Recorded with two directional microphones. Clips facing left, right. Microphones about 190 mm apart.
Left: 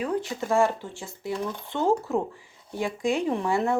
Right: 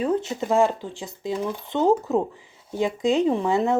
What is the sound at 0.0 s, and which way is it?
Speech, 25° right (ahead or behind).